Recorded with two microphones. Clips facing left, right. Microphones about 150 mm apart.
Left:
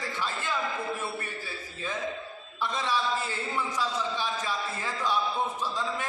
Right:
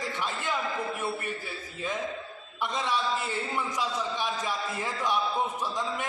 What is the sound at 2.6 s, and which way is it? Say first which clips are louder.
A man's voice: even; 15° right (ahead or behind).